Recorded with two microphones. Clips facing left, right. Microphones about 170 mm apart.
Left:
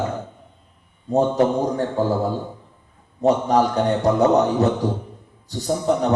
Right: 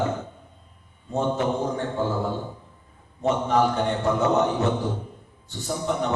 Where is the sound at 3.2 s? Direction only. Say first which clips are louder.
Left 4 dB; 35° left (ahead or behind).